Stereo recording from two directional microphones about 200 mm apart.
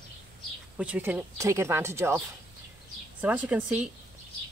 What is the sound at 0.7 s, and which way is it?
Speech, 5° right (ahead or behind).